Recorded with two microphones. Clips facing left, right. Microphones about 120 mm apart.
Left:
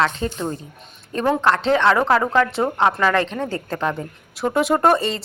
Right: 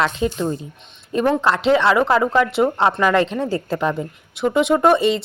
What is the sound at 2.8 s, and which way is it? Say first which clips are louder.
Speech: left 1 dB; 15° right (ahead or behind).